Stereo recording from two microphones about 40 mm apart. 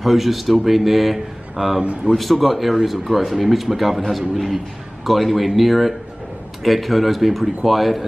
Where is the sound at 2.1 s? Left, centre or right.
Centre.